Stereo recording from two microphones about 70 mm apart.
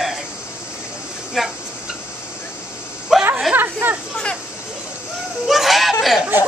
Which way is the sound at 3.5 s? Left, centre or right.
Right.